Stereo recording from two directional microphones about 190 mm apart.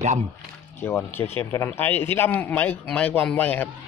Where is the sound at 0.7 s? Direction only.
10° left (ahead or behind).